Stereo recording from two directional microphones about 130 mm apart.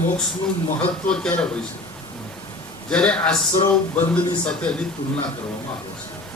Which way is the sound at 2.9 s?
10° left (ahead or behind).